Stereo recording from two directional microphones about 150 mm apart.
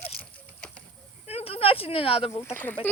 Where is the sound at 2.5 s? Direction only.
10° left (ahead or behind).